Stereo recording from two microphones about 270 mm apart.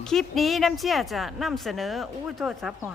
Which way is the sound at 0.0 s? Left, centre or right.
Centre.